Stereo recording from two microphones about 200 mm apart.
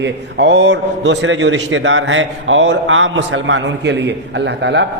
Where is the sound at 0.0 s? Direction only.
60° right (ahead or behind).